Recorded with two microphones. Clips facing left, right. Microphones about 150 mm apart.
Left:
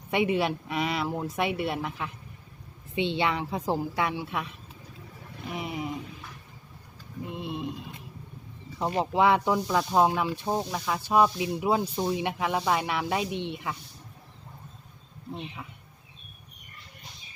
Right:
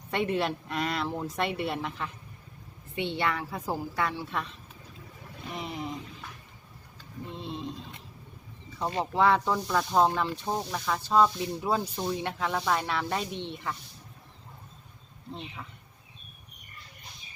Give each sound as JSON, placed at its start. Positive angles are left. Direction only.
{"t": 0.1, "sound": "speech", "side_deg": 10}
{"t": 2.9, "sound": "a woman's voice", "side_deg": 20}
{"t": 7.3, "sound": "a sound", "side_deg": 10}
{"t": 8.8, "sound": "speech", "side_deg": 15}